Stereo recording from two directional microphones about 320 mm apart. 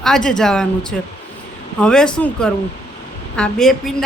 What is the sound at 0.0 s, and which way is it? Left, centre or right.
A woman's voice, centre.